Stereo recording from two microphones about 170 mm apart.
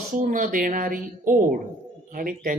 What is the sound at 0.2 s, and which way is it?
Speech, 50° right (ahead or behind).